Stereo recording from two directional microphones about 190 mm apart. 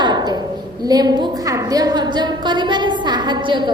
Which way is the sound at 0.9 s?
20° right (ahead or behind).